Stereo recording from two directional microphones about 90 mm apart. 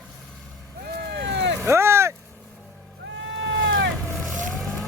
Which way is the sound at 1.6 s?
30° right (ahead or behind).